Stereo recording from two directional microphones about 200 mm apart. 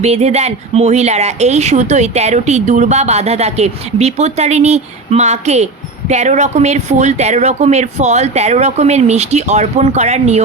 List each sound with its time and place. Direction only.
0.0 s speech: 30° right (ahead or behind)